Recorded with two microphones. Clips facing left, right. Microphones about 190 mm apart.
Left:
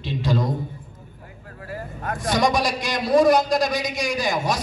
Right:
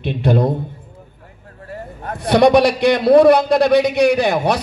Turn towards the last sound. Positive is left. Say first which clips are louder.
# right 8 dB
turn(degrees=-65)  # may be behind; listen again after turning